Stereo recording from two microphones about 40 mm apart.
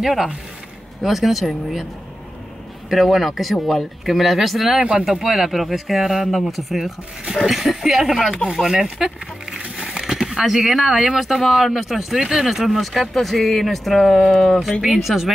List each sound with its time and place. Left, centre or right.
0.0 s speech: centre
2.9 s speech: centre
9.5 s a sound: centre
10.3 s speech: centre